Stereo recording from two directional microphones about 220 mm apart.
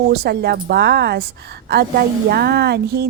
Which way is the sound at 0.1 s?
45° right (ahead or behind).